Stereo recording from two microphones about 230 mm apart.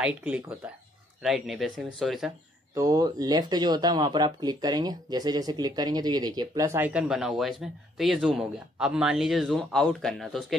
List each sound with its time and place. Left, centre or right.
0.0 s speech: centre
2.7 s speech: centre